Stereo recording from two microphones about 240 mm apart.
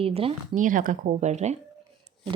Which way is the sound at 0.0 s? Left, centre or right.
Right.